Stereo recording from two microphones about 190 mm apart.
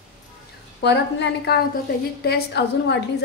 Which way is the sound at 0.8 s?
60° left (ahead or behind).